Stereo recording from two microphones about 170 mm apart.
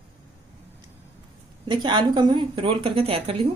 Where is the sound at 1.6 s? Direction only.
30° right (ahead or behind).